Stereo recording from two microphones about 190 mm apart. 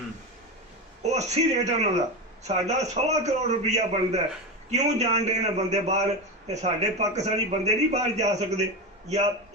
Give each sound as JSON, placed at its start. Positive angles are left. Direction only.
{"t": 1.0, "sound": "a man's voice", "side_deg": -35}